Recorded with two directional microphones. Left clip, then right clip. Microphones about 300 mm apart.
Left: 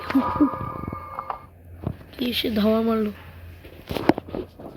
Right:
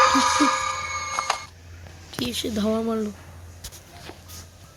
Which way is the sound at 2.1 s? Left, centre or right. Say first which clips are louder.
Left 2 dB; centre.